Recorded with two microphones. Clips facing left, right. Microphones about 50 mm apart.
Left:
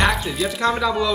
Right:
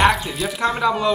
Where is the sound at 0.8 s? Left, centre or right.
Right.